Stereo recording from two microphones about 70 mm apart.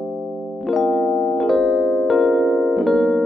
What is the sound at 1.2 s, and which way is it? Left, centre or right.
Music, centre.